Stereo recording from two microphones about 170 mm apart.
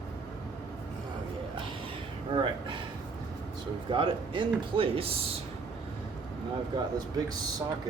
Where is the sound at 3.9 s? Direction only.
30° right (ahead or behind).